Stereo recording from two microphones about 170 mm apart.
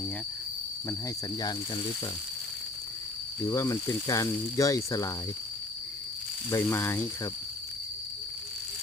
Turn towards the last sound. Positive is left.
turn(degrees=15)  # may be behind; listen again after turning